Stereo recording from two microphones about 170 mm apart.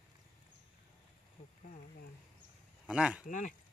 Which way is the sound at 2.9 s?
5° right (ahead or behind).